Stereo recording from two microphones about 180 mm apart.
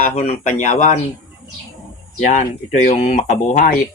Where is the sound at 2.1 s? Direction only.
45° left (ahead or behind).